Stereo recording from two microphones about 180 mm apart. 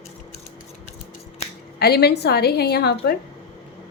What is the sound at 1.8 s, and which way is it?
A woman's voice, 60° left (ahead or behind).